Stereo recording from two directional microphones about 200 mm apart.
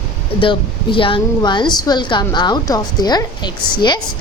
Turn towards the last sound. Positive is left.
turn(degrees=20)  # may be behind; listen again after turning